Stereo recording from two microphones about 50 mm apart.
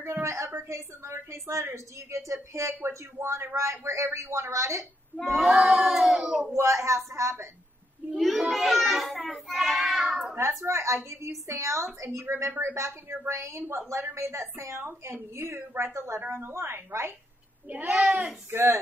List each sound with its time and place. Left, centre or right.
0.0 s a sound: right
0.7 s a woman's voice: right
3.2 s a woman's voice: right
5.2 s a child's voice: centre
6.5 s a woman's voice: right
8.2 s a child's voice: centre
10.0 s speech: right
10.6 s a woman's voice: right
12.3 s speech: right
12.7 s a woman's voice: right
14.8 s speech: right
17.6 s speech: right
18.5 s speech: right